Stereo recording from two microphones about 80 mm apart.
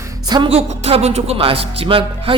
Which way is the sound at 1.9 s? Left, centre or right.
Right.